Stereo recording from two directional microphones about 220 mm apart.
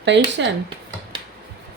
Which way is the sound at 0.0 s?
55° right (ahead or behind).